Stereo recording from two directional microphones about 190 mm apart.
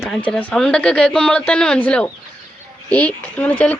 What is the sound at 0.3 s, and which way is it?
Speech, 5° left (ahead or behind).